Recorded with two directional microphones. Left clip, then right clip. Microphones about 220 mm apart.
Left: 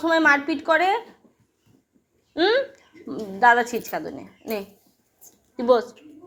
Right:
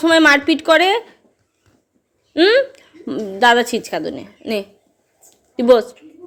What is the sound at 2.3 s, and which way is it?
A woman's voice, 40° right (ahead or behind).